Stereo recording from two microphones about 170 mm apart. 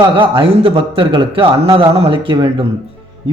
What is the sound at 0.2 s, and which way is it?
Speech, 30° right (ahead or behind).